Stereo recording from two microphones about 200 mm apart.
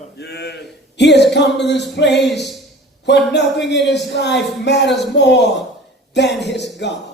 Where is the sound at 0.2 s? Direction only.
55° left (ahead or behind).